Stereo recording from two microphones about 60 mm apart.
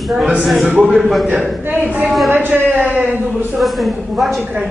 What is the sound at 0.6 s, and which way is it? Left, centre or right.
Speech, right.